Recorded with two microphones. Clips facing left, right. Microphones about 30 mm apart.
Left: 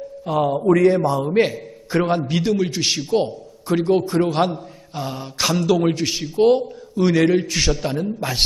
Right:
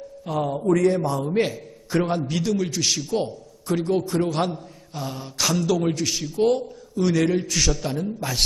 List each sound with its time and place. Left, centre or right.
0.3 s a man's voice: left